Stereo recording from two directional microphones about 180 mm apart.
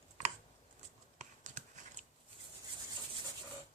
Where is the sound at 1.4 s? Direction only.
40° right (ahead or behind).